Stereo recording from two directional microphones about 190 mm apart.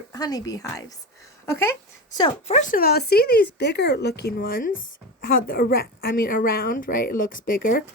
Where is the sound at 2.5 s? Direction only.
40° left (ahead or behind).